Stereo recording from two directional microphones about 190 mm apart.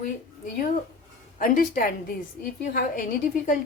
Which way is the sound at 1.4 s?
50° left (ahead or behind).